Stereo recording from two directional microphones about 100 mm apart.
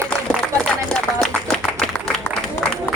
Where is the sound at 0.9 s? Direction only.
5° left (ahead or behind).